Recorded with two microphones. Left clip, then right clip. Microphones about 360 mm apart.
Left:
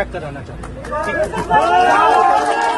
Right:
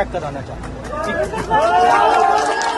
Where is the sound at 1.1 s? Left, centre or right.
Left.